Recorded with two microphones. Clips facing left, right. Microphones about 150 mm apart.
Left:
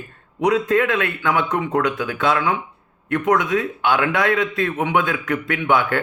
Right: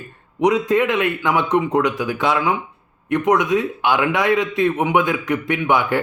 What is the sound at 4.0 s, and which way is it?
A man's voice, 10° right (ahead or behind).